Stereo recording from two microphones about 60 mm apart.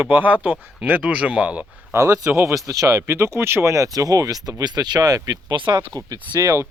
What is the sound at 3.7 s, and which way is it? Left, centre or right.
Speech, right.